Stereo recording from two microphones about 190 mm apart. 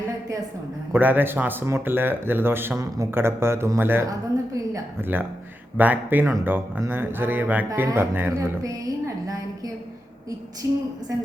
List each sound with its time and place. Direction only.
0.9 s a woman's voice: 10° right (ahead or behind)
10.6 s speech: 15° right (ahead or behind)